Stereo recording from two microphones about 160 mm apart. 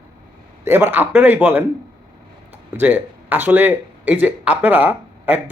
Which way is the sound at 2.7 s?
10° right (ahead or behind).